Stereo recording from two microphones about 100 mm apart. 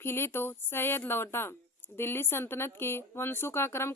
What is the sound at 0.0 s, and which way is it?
Speech, 20° left (ahead or behind).